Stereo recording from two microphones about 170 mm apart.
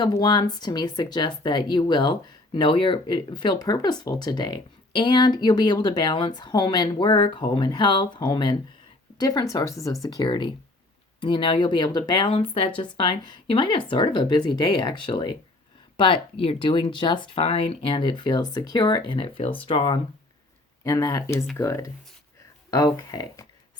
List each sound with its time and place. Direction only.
0.0 s speech: 25° left (ahead or behind)
20.8 s speech: 20° left (ahead or behind)
23.0 s speech: 20° left (ahead or behind)